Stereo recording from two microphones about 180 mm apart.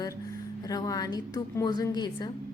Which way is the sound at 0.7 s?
20° left (ahead or behind).